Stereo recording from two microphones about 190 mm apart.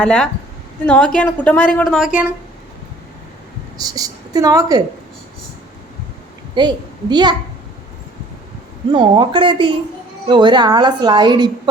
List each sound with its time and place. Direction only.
0.0 s a woman's voice: 5° left (ahead or behind)
3.8 s a woman's voice: 20° right (ahead or behind)
6.5 s a child's voice: 20° right (ahead or behind)
8.9 s a woman's voice: 25° right (ahead or behind)